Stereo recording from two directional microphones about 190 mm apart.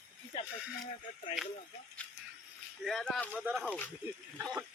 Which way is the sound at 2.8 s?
Centre (ahead or behind).